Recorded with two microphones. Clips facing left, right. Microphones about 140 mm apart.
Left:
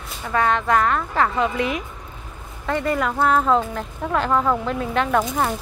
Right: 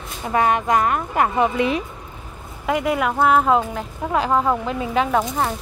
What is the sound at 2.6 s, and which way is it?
Speech, 10° right (ahead or behind).